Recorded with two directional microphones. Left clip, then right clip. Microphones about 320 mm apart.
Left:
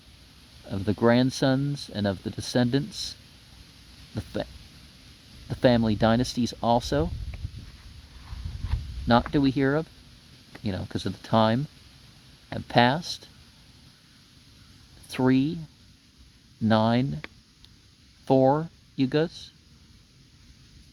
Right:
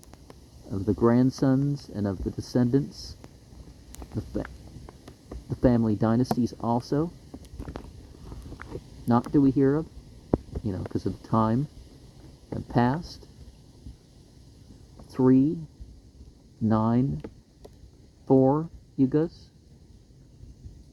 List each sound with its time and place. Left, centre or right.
0.7 s speech: left
5.5 s speech: left
9.0 s speech: left
15.1 s speech: left
16.6 s speech: left